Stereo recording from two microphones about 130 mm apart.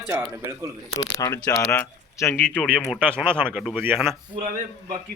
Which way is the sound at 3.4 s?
15° right (ahead or behind).